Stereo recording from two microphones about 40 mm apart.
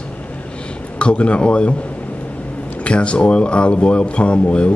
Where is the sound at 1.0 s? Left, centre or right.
Left.